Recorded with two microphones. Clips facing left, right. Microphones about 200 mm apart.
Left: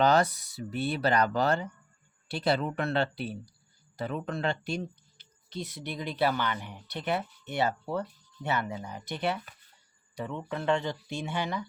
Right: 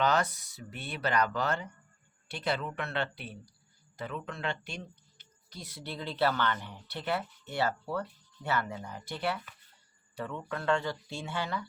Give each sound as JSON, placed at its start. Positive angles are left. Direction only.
{"t": 0.0, "sound": "speech", "side_deg": 35}
{"t": 5.5, "sound": "speech", "side_deg": 20}